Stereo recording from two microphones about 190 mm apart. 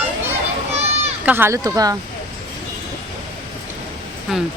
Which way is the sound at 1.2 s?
10° right (ahead or behind).